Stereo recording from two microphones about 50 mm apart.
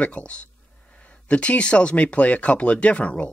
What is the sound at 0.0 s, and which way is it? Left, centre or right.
Speech, left.